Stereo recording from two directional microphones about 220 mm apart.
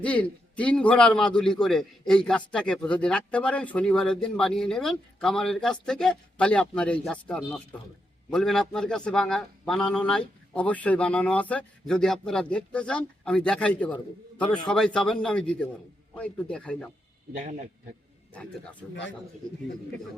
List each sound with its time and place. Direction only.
0.0 s a man's voice: 5° left (ahead or behind)
17.3 s a man's voice: 35° right (ahead or behind)